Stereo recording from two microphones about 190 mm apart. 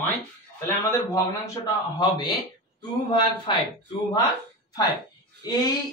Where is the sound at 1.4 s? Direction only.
20° left (ahead or behind).